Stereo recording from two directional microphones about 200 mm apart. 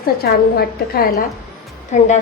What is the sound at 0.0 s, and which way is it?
A woman's voice, 50° left (ahead or behind).